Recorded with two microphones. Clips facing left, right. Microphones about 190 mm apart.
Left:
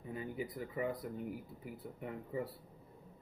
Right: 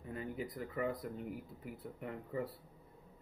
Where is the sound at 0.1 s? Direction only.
5° left (ahead or behind).